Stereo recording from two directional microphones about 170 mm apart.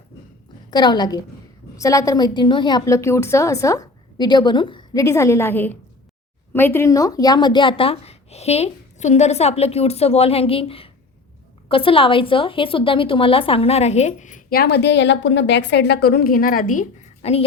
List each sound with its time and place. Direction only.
0.7 s a woman's voice: 25° left (ahead or behind); by 16.8 s 55° left (ahead or behind)
17.2 s a woman's voice: 40° left (ahead or behind)